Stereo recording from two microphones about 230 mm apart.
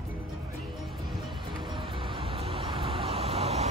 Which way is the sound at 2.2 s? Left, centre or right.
Right.